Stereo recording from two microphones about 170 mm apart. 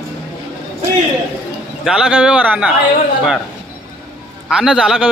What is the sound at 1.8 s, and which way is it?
Speech, 5° right (ahead or behind).